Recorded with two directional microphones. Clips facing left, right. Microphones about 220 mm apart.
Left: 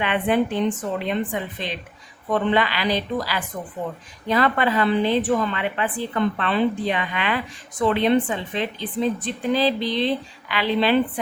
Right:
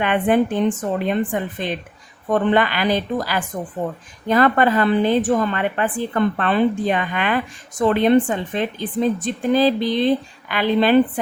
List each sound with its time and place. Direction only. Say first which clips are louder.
0.0 s a woman's voice: right 4 dB; 50° right (ahead or behind)